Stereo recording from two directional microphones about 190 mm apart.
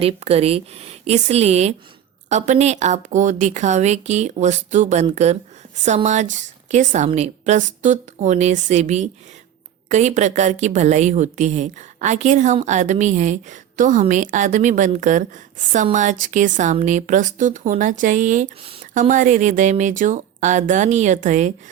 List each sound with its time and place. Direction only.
0.0 s speech: 30° right (ahead or behind)